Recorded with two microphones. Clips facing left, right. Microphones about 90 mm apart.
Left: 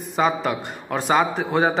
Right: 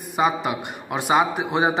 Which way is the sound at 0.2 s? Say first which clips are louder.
Left 1 dB; 10° right (ahead or behind).